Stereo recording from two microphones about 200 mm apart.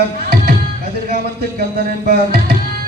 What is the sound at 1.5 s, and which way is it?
Music, 50° right (ahead or behind).